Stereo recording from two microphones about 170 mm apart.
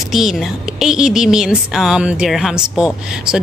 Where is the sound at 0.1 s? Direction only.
Centre (ahead or behind).